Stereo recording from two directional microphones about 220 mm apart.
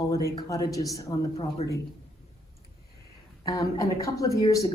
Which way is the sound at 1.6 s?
30° left (ahead or behind).